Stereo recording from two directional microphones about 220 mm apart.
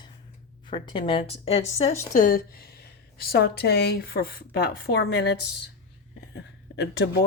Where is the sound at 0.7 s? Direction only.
25° left (ahead or behind).